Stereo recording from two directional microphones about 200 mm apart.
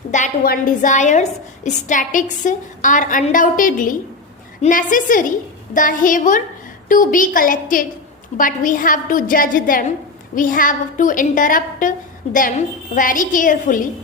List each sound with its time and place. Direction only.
0.1 s a woman's voice: 40° left (ahead or behind)